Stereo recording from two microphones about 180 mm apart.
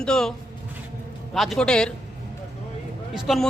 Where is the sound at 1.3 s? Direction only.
Centre (ahead or behind).